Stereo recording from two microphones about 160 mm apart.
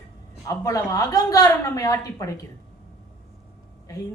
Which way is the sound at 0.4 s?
20° left (ahead or behind).